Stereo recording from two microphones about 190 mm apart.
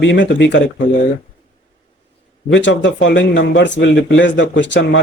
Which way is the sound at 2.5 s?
70° left (ahead or behind).